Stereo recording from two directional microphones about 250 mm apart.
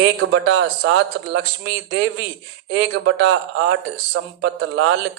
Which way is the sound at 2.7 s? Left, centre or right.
Right.